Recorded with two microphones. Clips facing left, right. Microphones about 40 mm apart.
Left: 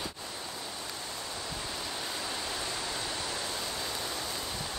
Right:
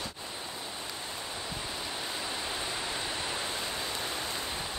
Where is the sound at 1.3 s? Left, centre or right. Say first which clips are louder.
Even; centre.